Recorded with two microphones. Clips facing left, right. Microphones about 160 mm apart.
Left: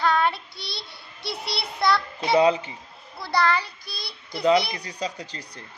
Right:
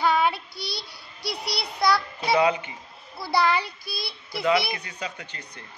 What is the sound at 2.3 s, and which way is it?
Speech, 30° left (ahead or behind).